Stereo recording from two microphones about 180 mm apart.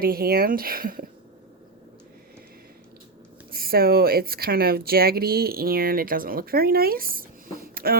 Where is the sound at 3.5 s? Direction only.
55° right (ahead or behind).